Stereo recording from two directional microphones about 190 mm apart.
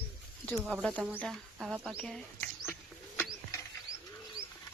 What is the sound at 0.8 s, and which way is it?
Speech, 5° left (ahead or behind).